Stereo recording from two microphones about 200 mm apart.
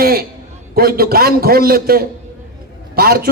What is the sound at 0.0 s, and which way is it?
A man's voice, 50° right (ahead or behind).